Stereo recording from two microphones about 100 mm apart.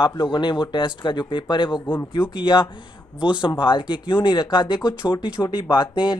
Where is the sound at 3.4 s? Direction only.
55° left (ahead or behind).